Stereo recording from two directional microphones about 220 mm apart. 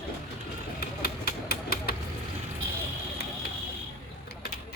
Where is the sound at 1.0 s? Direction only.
45° left (ahead or behind).